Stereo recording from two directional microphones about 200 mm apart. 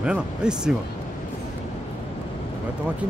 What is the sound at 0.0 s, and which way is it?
Speech, 5° right (ahead or behind).